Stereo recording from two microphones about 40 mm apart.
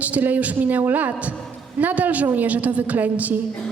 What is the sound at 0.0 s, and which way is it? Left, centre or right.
A man's voice, right.